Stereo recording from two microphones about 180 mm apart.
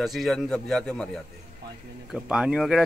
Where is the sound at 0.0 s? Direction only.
Centre (ahead or behind).